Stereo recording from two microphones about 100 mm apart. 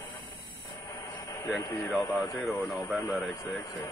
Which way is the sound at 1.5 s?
Centre (ahead or behind).